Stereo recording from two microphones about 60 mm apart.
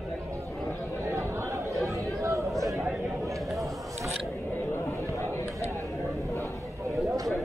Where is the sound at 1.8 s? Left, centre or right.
Right.